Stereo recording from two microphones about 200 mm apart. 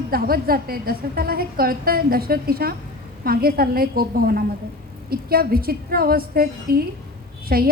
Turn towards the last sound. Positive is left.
turn(degrees=-50)  # may be behind; listen again after turning